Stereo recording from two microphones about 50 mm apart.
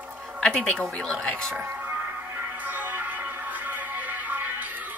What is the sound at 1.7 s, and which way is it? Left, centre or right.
Music, right.